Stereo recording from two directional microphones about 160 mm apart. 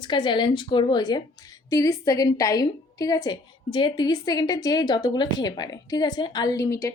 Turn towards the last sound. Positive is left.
turn(degrees=20)  # may be behind; listen again after turning